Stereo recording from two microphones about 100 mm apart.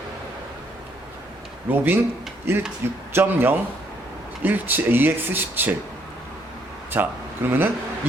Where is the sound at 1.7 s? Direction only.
20° right (ahead or behind).